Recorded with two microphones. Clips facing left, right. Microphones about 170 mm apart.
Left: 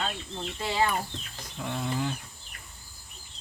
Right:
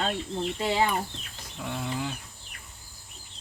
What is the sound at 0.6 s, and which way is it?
Speech, 20° right (ahead or behind).